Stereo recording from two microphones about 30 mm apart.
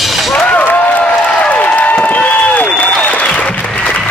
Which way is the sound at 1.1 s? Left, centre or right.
Left.